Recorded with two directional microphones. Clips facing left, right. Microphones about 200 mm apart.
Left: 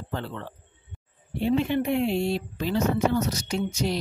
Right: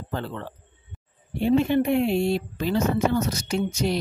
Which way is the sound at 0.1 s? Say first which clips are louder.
Right 2 dB; 45° right (ahead or behind).